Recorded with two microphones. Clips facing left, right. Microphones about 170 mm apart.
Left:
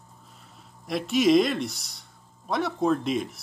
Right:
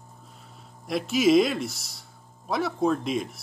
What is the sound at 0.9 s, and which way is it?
Speech, centre (ahead or behind).